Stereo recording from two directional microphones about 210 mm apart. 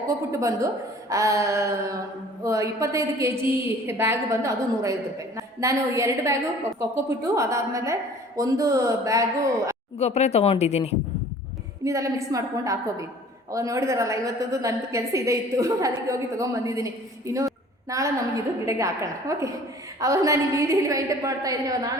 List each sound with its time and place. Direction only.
0.3 s a woman's voice: 15° right (ahead or behind)
10.0 s a woman's voice: 30° left (ahead or behind)
11.9 s a woman's voice: 15° right (ahead or behind)